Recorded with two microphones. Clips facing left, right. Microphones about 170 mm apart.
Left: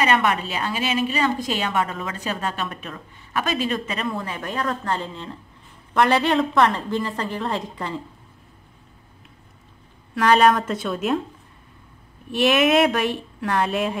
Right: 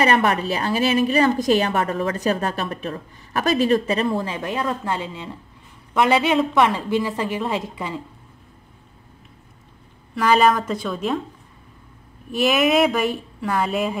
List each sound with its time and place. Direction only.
0.0 s a woman's voice: 35° right (ahead or behind); by 8.0 s centre (ahead or behind)
10.1 s speech: centre (ahead or behind)
12.3 s speech: centre (ahead or behind)